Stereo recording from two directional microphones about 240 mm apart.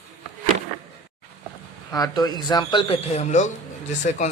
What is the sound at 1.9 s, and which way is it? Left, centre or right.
A man's voice, centre.